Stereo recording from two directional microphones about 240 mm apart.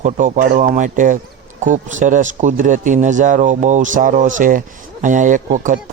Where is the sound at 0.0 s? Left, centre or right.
Right.